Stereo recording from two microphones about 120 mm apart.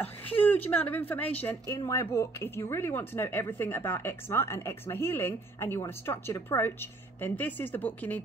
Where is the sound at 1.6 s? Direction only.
25° left (ahead or behind).